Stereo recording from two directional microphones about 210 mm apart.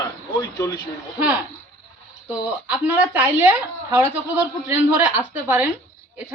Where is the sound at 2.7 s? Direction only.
10° right (ahead or behind).